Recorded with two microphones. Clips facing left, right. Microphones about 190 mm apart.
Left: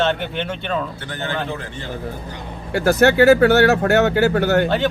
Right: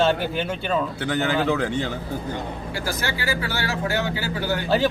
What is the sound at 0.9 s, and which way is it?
Speech, 90° right.